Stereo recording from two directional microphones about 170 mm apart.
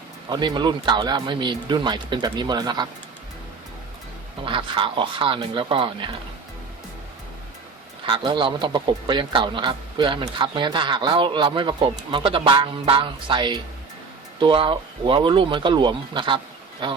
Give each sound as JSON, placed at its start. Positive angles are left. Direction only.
{"t": 0.3, "sound": "a man's voice", "side_deg": -25}
{"t": 4.4, "sound": "a man's voice", "side_deg": -30}
{"t": 8.0, "sound": "a man's voice", "side_deg": -30}